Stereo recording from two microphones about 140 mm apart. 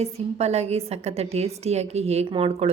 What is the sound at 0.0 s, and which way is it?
A woman's voice, 50° right (ahead or behind).